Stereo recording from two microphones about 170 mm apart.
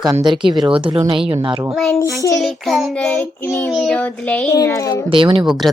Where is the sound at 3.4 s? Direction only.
10° left (ahead or behind).